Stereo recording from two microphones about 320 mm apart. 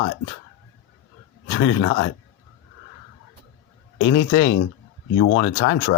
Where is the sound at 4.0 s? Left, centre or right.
Left.